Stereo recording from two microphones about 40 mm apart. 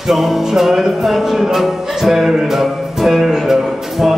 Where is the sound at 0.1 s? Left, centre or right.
Centre.